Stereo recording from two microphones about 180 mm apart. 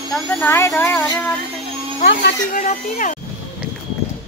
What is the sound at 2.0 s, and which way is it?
A woman's voice, 55° left (ahead or behind).